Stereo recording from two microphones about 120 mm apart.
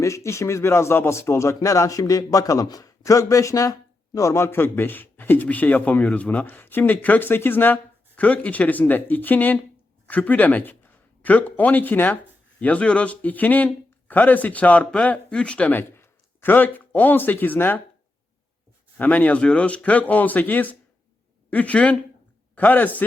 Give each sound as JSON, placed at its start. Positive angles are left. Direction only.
{"t": 0.0, "sound": "speech", "side_deg": 25}
{"t": 18.9, "sound": "speech", "side_deg": 15}